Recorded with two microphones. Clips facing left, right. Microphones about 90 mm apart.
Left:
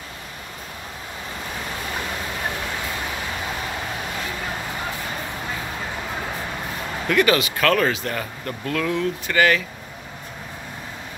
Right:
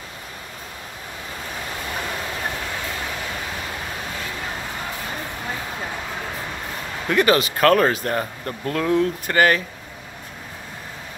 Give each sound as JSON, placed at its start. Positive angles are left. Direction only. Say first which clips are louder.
{"t": 7.1, "sound": "speech", "louder": "right 1 dB", "side_deg": -35}